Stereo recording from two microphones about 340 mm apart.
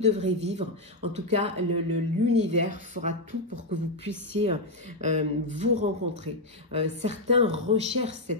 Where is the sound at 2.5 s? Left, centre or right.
Right.